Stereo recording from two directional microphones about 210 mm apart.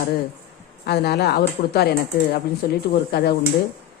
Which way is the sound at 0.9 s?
50° left (ahead or behind).